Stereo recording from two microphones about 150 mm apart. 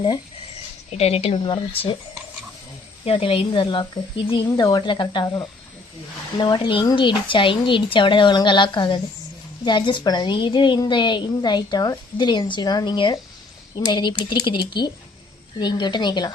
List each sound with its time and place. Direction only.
0.9 s a woman's voice: 45° left (ahead or behind)
3.0 s a woman's voice: 40° left (ahead or behind)